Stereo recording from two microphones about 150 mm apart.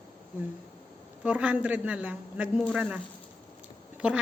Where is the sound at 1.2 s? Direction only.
10° right (ahead or behind).